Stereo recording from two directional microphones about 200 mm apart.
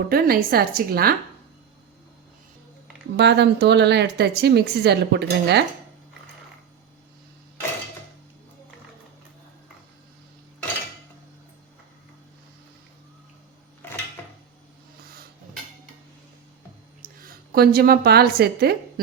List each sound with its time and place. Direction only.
0.1 s a woman's voice: 50° right (ahead or behind)
3.2 s speech: 60° right (ahead or behind)
13.8 s a sound: 10° left (ahead or behind)
17.0 s a woman's voice: 50° right (ahead or behind)